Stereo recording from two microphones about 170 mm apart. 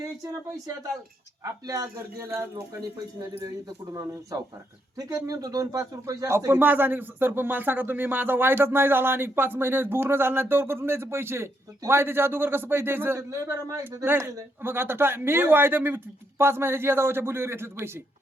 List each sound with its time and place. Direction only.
0.0 s speech: 20° right (ahead or behind)